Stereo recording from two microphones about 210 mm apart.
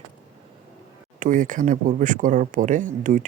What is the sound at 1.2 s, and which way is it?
Speech, 40° right (ahead or behind).